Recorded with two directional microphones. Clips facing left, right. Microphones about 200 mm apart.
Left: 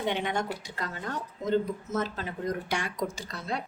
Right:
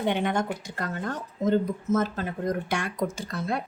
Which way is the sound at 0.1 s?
50° right (ahead or behind).